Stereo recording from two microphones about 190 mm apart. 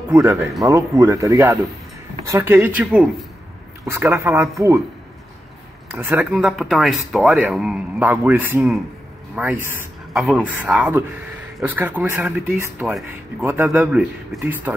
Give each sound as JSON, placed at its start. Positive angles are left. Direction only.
{"t": 0.1, "sound": "speech", "side_deg": -15}
{"t": 5.9, "sound": "a man's voice", "side_deg": -10}